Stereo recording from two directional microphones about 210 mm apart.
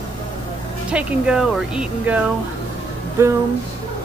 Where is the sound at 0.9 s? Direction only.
5° right (ahead or behind).